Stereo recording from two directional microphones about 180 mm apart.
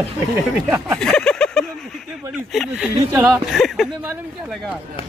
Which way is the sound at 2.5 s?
5° right (ahead or behind).